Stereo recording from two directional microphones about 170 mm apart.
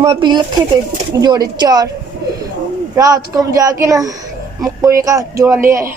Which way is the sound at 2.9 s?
20° right (ahead or behind).